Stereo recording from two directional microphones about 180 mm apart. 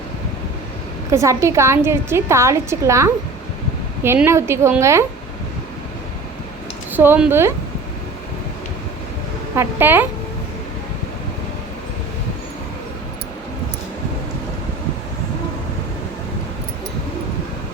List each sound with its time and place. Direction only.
1.1 s a woman's voice: 15° right (ahead or behind)
6.9 s a woman's voice: 10° right (ahead or behind)
9.6 s a woman's voice: 10° right (ahead or behind)